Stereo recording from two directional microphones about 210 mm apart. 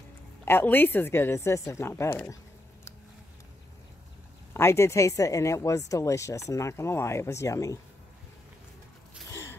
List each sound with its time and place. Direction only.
0.5 s speech: 10° left (ahead or behind)
4.6 s speech: 15° left (ahead or behind)
9.3 s a sound: 15° left (ahead or behind)